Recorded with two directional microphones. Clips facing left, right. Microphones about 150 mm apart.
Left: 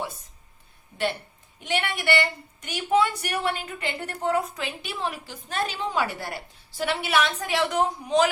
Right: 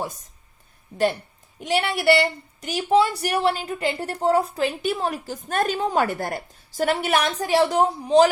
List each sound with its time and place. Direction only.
1.6 s a woman's voice: 35° right (ahead or behind)